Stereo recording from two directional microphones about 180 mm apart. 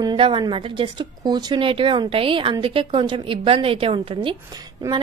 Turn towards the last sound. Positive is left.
turn(degrees=-20)  # may be behind; listen again after turning